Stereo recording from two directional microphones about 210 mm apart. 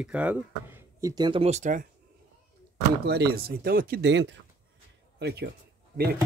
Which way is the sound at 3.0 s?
50° right (ahead or behind).